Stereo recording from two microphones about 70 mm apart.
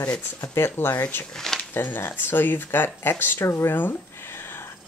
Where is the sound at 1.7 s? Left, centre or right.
Left.